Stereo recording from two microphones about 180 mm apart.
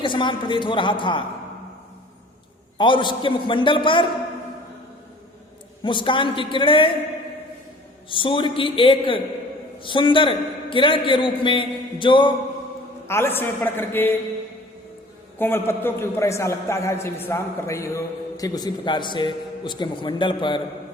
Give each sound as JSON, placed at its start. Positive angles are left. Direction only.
{"t": 0.0, "sound": "a man's voice", "side_deg": 25}
{"t": 2.7, "sound": "a man's voice", "side_deg": 25}
{"t": 5.8, "sound": "a man's voice", "side_deg": 25}
{"t": 8.1, "sound": "a man's voice", "side_deg": 30}
{"t": 13.1, "sound": "a man's voice", "side_deg": 15}
{"t": 15.4, "sound": "a man's voice", "side_deg": 10}